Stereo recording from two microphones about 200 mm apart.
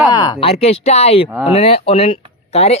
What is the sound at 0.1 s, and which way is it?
Speech, 20° left (ahead or behind).